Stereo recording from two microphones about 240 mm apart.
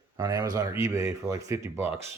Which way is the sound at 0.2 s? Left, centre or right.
Centre.